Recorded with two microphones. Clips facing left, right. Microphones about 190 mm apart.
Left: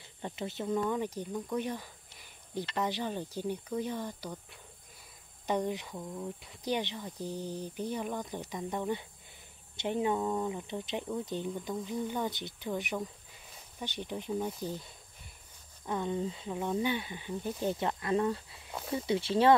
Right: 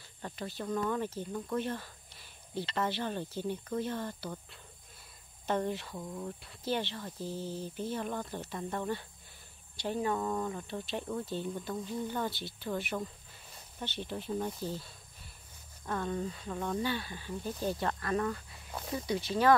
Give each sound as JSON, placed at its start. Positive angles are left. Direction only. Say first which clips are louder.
{"t": 0.2, "sound": "speech", "louder": "left 3 dB", "side_deg": 20}